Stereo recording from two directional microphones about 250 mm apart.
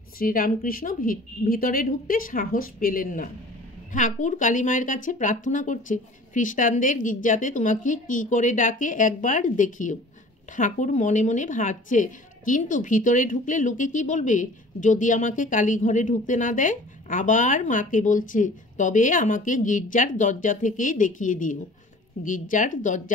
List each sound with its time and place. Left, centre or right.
0.2 s a woman's voice: left